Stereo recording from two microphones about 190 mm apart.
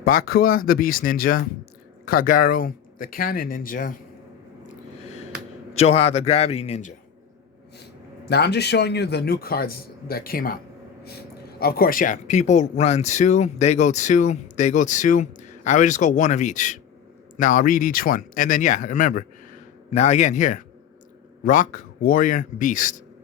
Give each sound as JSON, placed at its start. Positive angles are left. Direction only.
{"t": 0.0, "sound": "speech", "side_deg": 50}
{"t": 5.7, "sound": "speech", "side_deg": 35}
{"t": 8.3, "sound": "a man's voice", "side_deg": 60}
{"t": 11.6, "sound": "speech", "side_deg": 50}